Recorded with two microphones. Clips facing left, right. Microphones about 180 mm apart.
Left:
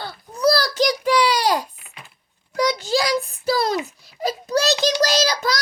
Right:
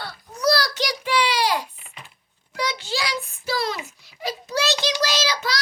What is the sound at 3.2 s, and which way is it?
Child singing, 40° left (ahead or behind).